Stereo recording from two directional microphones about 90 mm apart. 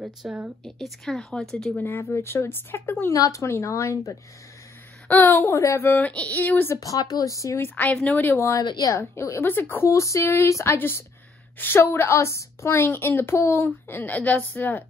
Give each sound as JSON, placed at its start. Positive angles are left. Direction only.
{"t": 0.0, "sound": "speech", "side_deg": -15}
{"t": 0.7, "sound": "speech", "side_deg": 0}
{"t": 1.8, "sound": "a woman's voice", "side_deg": 25}
{"t": 3.1, "sound": "a woman's voice", "side_deg": 35}
{"t": 5.0, "sound": "a woman's voice", "side_deg": 25}
{"t": 5.8, "sound": "a woman's voice", "side_deg": 20}
{"t": 6.7, "sound": "a woman's voice", "side_deg": 40}
{"t": 7.6, "sound": "a woman's voice", "side_deg": 20}
{"t": 8.4, "sound": "a woman's voice", "side_deg": 35}